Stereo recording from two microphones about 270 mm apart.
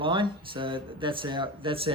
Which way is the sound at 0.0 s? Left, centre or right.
Centre.